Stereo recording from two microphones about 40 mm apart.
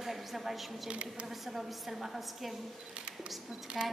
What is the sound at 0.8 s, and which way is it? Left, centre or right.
Speech, right.